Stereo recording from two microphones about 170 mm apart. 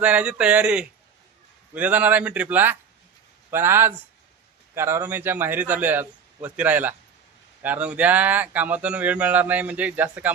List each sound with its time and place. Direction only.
0.0 s speech: 5° right (ahead or behind)